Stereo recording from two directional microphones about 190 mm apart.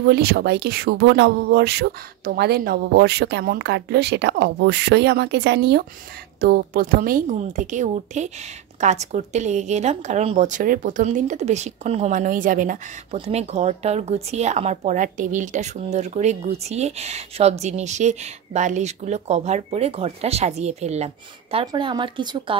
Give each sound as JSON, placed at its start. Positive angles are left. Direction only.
{"t": 0.0, "sound": "speech", "side_deg": -55}